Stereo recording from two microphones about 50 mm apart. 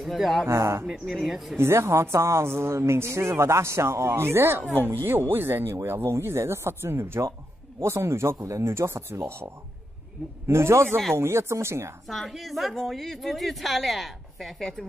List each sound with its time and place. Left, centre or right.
0.0 s a woman's voice: centre
0.5 s speech: right
1.2 s a woman's voice: centre
1.6 s speech: right
4.6 s speech: right
6.0 s speech: right
7.8 s speech: right
12.1 s a woman's voice: centre